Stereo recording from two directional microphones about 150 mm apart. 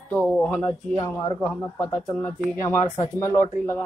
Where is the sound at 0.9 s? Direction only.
20° left (ahead or behind).